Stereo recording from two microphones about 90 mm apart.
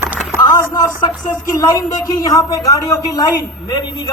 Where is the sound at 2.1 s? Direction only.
40° left (ahead or behind).